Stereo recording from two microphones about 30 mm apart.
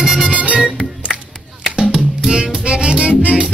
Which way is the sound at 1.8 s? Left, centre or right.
Right.